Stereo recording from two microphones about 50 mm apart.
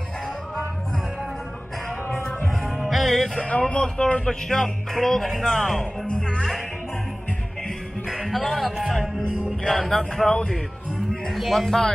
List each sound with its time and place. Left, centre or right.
2.9 s music: centre
3.3 s speech: left
8.1 s speech: centre
9.7 s music: centre
11.3 s music: centre